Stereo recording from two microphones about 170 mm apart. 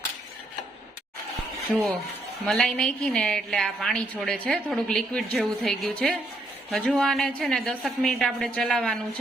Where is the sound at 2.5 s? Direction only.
Centre (ahead or behind).